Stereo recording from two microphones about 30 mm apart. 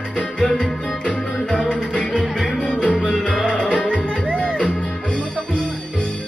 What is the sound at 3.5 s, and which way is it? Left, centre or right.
Music, left.